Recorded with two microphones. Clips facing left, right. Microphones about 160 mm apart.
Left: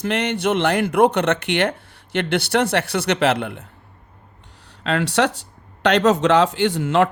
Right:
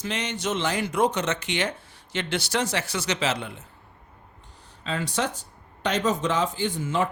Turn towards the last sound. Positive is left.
turn(degrees=70)  # may be behind; listen again after turning